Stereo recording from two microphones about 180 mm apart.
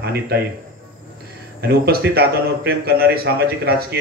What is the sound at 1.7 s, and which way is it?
A man's voice, 60° right (ahead or behind).